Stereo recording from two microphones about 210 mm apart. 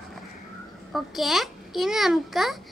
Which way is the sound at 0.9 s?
Centre (ahead or behind).